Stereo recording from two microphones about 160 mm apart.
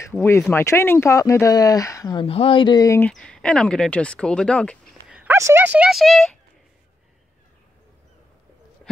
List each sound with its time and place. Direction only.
0.1 s speech: 10° left (ahead or behind)
2.2 s speech: 35° left (ahead or behind)
3.0 s speech: 5° left (ahead or behind)
5.0 s speech: 10° right (ahead or behind)